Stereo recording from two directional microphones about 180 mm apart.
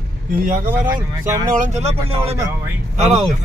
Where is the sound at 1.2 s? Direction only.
15° right (ahead or behind).